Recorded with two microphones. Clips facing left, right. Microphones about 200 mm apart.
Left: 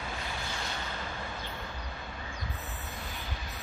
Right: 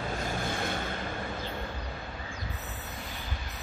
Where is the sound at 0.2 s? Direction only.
50° right (ahead or behind).